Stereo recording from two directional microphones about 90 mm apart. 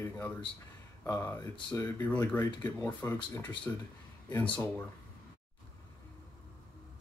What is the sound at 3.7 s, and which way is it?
Speech, 25° left (ahead or behind).